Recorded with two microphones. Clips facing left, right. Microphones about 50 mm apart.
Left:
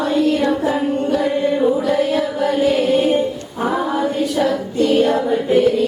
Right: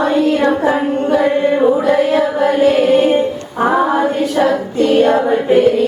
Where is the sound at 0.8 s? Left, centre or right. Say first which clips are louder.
Right 4 dB; right.